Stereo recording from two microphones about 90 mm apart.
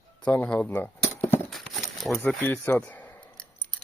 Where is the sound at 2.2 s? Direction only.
20° left (ahead or behind).